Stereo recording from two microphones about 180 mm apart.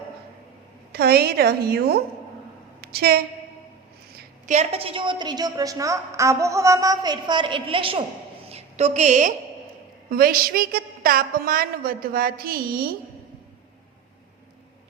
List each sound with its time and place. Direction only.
0.9 s a woman's voice: 60° right (ahead or behind)
4.4 s a woman's voice: 35° right (ahead or behind)
8.4 s a sound: 35° right (ahead or behind)
10.1 s a woman's voice: 55° right (ahead or behind)